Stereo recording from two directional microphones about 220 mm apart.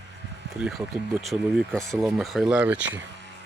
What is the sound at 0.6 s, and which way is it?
Speech, centre (ahead or behind).